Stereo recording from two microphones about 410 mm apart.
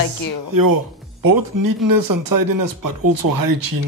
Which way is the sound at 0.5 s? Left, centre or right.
Right.